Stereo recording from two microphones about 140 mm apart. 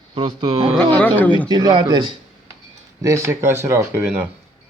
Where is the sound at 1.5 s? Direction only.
30° right (ahead or behind).